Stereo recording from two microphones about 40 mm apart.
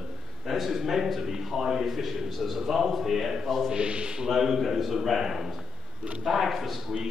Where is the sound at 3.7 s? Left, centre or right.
Right.